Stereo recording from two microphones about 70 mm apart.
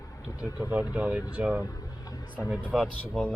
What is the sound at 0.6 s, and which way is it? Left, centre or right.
Speech, right.